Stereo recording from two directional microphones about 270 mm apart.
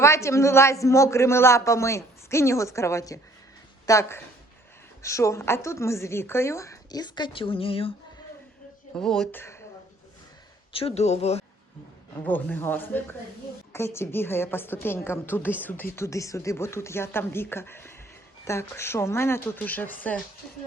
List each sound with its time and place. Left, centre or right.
0.0 s a woman's voice: centre
9.0 s speech: centre
10.7 s speech: left
12.2 s a woman's voice: centre